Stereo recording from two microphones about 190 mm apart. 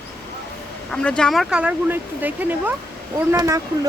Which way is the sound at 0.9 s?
5° left (ahead or behind).